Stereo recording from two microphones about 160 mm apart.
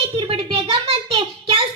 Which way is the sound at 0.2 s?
35° right (ahead or behind).